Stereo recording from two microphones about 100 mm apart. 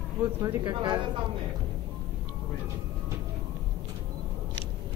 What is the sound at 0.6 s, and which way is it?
Speech, 45° right (ahead or behind).